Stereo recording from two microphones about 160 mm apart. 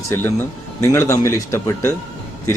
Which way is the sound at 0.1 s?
15° left (ahead or behind).